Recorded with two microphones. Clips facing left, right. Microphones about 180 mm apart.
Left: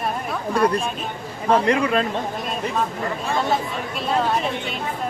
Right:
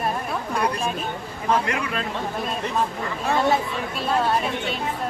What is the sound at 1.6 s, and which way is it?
Speech, 30° left (ahead or behind).